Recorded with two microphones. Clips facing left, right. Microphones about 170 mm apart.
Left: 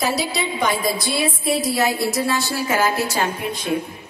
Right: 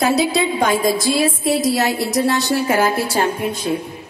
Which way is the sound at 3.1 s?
50° right (ahead or behind).